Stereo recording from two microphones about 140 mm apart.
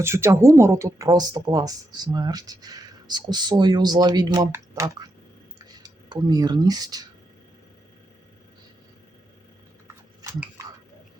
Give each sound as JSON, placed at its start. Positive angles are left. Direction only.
{"t": 0.0, "sound": "speech", "side_deg": -20}